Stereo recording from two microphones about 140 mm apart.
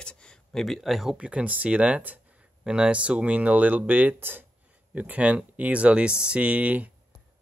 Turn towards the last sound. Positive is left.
turn(degrees=-10)  # may be behind; listen again after turning